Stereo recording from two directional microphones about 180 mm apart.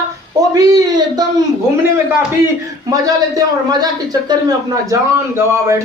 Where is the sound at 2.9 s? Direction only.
20° right (ahead or behind).